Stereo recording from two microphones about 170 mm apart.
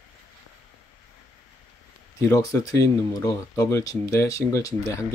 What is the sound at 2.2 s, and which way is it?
Speech, 20° left (ahead or behind).